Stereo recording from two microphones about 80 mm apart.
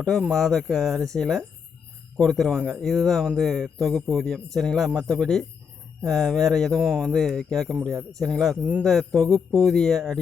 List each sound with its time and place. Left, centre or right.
0.0 s speech: centre
8.5 s speech: centre
8.8 s speech: centre